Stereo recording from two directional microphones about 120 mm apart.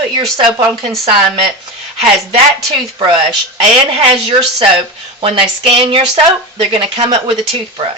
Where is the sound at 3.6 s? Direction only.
55° right (ahead or behind).